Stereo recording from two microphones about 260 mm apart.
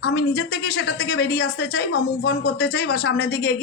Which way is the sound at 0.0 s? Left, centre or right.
Left.